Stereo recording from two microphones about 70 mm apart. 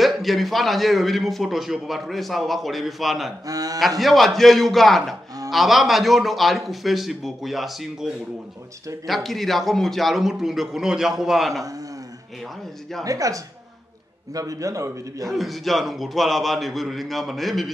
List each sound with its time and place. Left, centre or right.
0.0 s a man's voice: centre
3.4 s speech: right
4.0 s a man's voice: centre
13.0 s a man's voice: right
15.2 s a man's voice: centre